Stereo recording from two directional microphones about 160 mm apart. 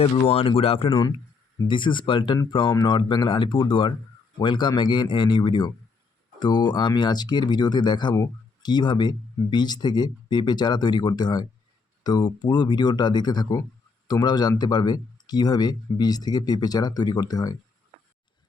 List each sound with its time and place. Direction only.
0.0 s speech: 40° left (ahead or behind); by 17.6 s 25° left (ahead or behind)